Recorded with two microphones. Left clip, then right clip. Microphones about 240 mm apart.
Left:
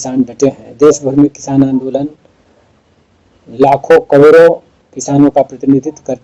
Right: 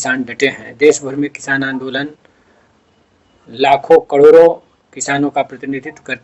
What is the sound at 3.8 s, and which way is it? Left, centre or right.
Speech, right.